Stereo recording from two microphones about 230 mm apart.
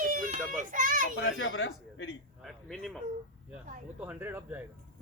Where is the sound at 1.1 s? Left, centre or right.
Left.